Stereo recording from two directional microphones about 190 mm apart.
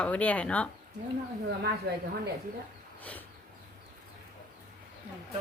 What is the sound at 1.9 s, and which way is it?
Speech, 55° right (ahead or behind).